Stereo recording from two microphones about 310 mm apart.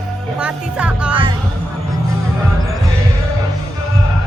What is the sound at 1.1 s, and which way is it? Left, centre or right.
Music, centre.